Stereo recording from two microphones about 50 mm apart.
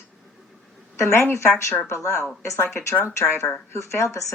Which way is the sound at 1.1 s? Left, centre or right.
Left.